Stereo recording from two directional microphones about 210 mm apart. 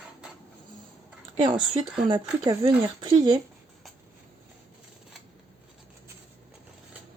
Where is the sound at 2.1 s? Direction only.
20° right (ahead or behind).